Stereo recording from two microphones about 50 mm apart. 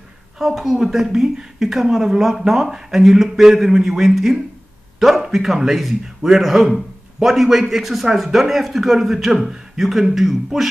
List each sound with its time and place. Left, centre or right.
0.4 s a woman's voice: centre